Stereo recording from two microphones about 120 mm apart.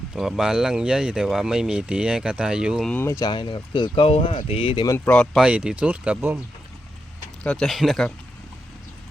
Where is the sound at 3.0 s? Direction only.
30° left (ahead or behind); by 4.9 s 45° left (ahead or behind).